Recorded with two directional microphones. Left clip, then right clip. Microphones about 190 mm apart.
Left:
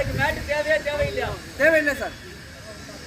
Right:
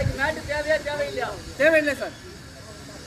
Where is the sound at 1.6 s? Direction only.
10° right (ahead or behind).